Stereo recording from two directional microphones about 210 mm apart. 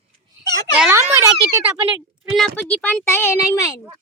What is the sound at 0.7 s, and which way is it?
Speech, 5° right (ahead or behind).